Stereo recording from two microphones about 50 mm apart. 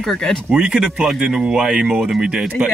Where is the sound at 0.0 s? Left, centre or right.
Centre.